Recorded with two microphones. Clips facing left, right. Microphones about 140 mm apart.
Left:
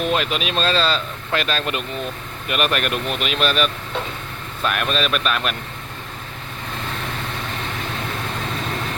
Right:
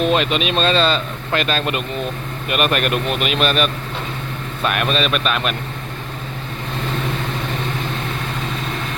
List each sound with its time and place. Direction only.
0.0 s speech: centre (ahead or behind)